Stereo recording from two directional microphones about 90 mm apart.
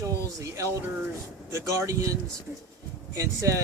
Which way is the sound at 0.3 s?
35° right (ahead or behind).